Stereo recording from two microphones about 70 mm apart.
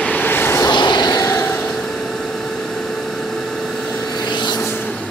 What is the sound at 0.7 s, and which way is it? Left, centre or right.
Vehicle, left.